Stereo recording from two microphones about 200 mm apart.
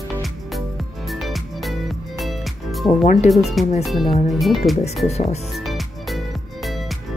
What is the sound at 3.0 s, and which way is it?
Speech, 35° left (ahead or behind).